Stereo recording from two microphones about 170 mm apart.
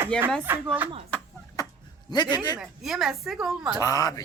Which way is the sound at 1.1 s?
10° left (ahead or behind).